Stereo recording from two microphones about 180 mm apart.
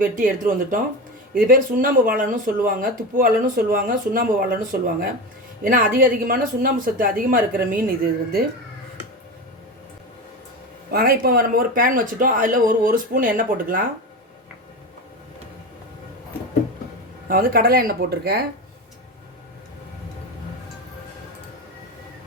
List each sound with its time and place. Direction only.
0.0 s speech: 50° right (ahead or behind)
10.9 s speech: 55° right (ahead or behind)
17.2 s speech: 55° right (ahead or behind)